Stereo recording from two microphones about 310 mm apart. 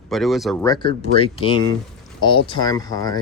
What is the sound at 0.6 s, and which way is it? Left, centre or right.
Speech, centre.